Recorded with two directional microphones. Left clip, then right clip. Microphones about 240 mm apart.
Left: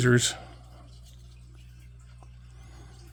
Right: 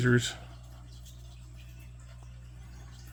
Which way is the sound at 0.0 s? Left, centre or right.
Left.